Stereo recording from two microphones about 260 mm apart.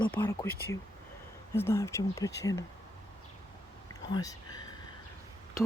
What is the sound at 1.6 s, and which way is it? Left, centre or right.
Speech, centre.